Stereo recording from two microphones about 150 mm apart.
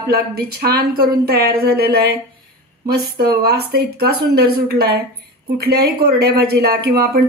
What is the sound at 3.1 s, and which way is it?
Speech, 90° right.